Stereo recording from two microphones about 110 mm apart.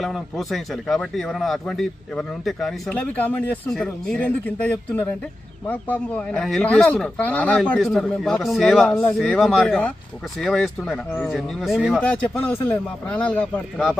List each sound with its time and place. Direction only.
0.0 s a man's voice: centre (ahead or behind)
2.9 s speech: 15° left (ahead or behind); by 8.9 s centre (ahead or behind)
8.9 s speech: 20° left (ahead or behind)
9.4 s a man's voice: centre (ahead or behind)
12.0 s speech: 15° left (ahead or behind)
13.7 s a man's voice: centre (ahead or behind)